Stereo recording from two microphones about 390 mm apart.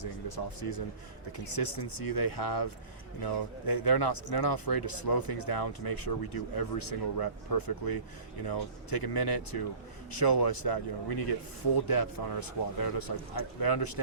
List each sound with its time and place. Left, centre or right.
0.0 s speech: left
3.7 s speech: left